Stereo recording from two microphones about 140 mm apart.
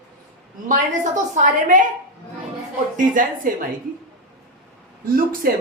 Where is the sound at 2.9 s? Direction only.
70° right (ahead or behind).